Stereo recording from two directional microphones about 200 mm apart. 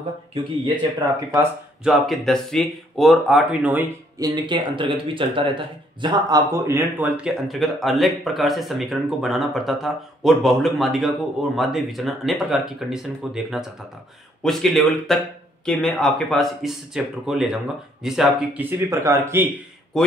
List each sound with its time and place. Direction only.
0.3 s speech: 25° right (ahead or behind)
1.9 s speech: centre (ahead or behind)
4.2 s a man's voice: 25° right (ahead or behind)
19.9 s speech: centre (ahead or behind)